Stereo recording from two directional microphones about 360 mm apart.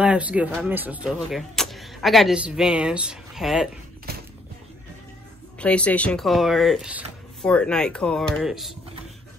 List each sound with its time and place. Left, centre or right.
0.0 s speech: centre
4.1 s music: right
5.6 s speech: centre